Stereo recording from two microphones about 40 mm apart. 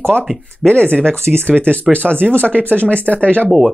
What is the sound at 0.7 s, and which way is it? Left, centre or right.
Speech, left.